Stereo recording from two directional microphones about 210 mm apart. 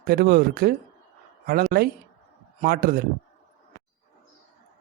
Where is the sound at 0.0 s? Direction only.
45° right (ahead or behind).